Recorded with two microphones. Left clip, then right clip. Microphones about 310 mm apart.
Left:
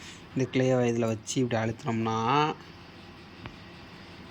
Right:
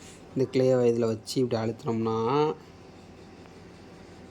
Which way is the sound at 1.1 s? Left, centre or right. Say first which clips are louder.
Right 2 dB; right.